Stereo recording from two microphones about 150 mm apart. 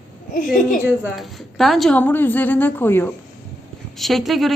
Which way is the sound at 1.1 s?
Centre (ahead or behind).